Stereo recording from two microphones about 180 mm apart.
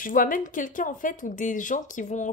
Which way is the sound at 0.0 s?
50° left (ahead or behind).